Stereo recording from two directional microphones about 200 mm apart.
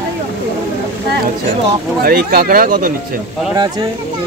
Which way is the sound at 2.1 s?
45° right (ahead or behind).